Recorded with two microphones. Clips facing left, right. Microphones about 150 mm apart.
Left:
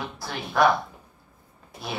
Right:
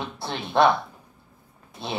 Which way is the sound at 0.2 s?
25° right (ahead or behind).